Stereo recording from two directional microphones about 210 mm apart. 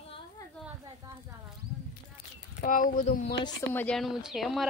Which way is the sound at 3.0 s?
35° left (ahead or behind).